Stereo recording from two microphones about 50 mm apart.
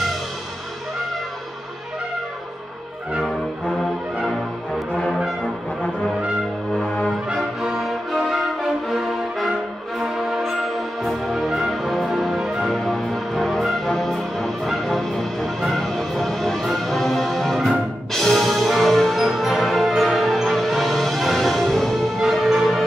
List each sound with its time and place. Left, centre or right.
6.9 s music: left
7.6 s music: centre
11.0 s music: centre